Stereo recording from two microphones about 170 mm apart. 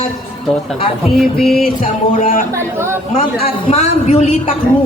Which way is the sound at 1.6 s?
55° left (ahead or behind).